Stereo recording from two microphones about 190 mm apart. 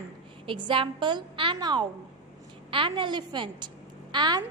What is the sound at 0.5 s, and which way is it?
A woman's voice, 25° right (ahead or behind).